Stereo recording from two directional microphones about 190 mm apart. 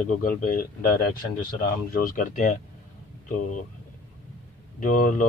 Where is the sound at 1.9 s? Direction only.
45° left (ahead or behind).